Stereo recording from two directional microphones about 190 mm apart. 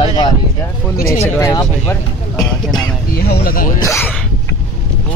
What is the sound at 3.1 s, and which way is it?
Speech, 55° left (ahead or behind).